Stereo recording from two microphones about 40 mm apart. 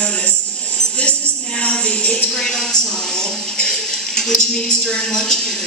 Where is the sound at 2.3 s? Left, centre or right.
Centre.